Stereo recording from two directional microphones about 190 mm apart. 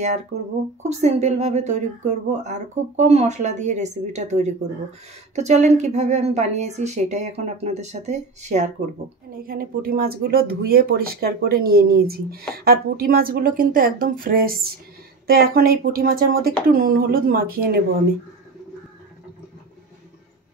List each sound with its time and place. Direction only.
0.8 s a woman's voice: 35° right (ahead or behind)
9.4 s speech: 50° right (ahead or behind)